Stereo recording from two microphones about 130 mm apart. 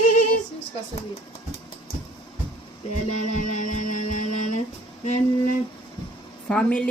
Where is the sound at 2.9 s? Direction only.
75° left (ahead or behind).